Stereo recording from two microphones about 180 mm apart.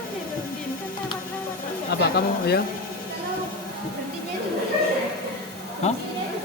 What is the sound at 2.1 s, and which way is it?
Speech, 60° left (ahead or behind).